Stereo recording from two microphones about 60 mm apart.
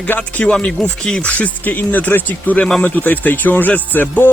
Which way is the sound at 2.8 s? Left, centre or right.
Left.